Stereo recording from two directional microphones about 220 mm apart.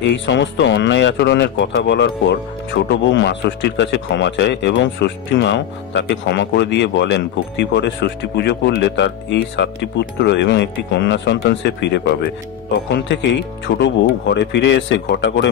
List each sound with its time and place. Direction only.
0.0 s speech: 50° left (ahead or behind)